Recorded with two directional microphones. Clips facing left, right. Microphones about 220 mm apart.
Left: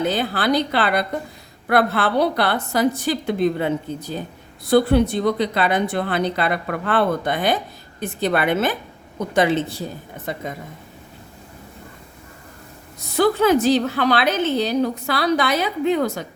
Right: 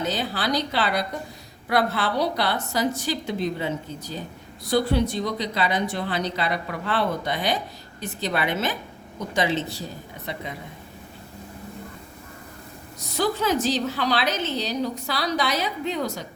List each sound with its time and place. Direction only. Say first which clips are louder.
0.0 s a woman's voice: left 5 dB; 55° left (ahead or behind)
13.1 s a woman's voice: left 7 dB; 55° left (ahead or behind)